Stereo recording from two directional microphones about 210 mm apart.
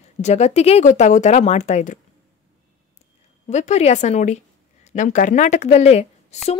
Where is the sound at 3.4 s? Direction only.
35° left (ahead or behind).